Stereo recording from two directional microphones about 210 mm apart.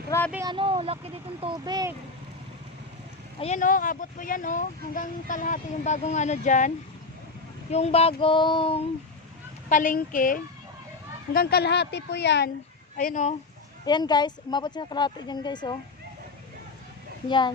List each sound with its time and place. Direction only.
0.1 s speech: 15° left (ahead or behind)
0.4 s speech: 25° right (ahead or behind)
3.4 s a woman's voice: 35° left (ahead or behind)
9.6 s a woman's voice: 40° left (ahead or behind)
13.0 s speech: 40° left (ahead or behind)
13.8 s a woman's voice: 20° left (ahead or behind)
17.2 s a woman's voice: 20° left (ahead or behind)